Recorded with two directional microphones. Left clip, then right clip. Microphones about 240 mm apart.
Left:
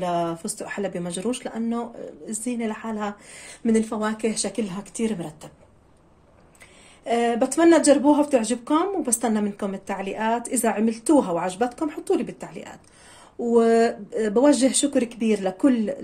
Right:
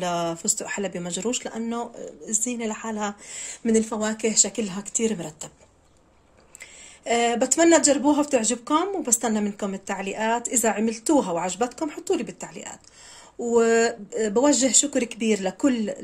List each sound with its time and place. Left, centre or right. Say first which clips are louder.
0.0 s speech: left 1 dB; right
7.1 s speech: even; right